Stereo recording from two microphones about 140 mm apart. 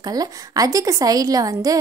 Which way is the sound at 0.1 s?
25° right (ahead or behind).